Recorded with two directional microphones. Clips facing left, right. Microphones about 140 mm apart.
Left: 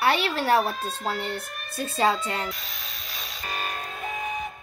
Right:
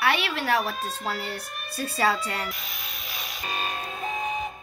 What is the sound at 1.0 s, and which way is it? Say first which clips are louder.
A child's voice: left 5 dB; 25° left (ahead or behind).